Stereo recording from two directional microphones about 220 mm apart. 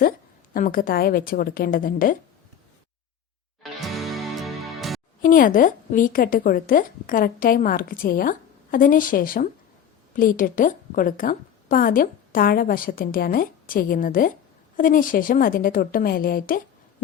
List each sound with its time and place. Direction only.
0.5 s a woman's voice: 40° left (ahead or behind)
3.6 s music: centre (ahead or behind)
5.2 s a woman's voice: 40° left (ahead or behind)